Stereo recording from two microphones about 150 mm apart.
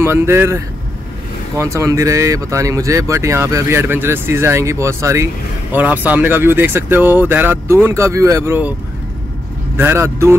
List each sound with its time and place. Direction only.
0.0 s speech: 15° right (ahead or behind)
9.8 s speech: 15° right (ahead or behind)